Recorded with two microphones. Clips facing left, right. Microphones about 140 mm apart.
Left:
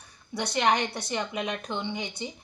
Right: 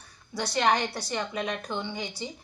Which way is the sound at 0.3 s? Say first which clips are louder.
Even; 20° left (ahead or behind).